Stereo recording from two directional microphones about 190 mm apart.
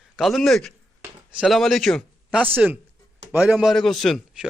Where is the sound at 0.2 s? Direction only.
Centre (ahead or behind).